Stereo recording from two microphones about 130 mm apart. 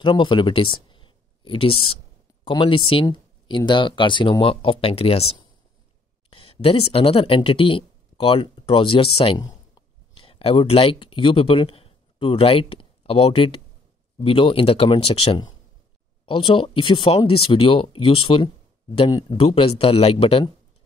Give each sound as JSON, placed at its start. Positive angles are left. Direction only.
{"t": 0.0, "sound": "speech", "side_deg": 40}
{"t": 9.4, "sound": "a sound", "side_deg": 30}
{"t": 10.1, "sound": "speech", "side_deg": 45}
{"t": 16.3, "sound": "speech", "side_deg": 40}
{"t": 19.3, "sound": "speech", "side_deg": 45}